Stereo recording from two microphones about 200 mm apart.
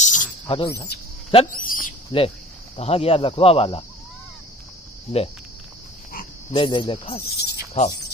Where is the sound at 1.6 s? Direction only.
45° left (ahead or behind).